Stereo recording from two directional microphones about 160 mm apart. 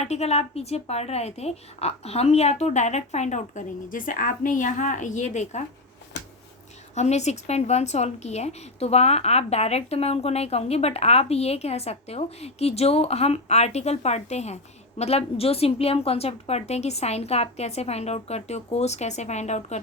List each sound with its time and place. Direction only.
0.0 s a woman's voice: 40° left (ahead or behind)
6.9 s a woman's voice: 45° left (ahead or behind)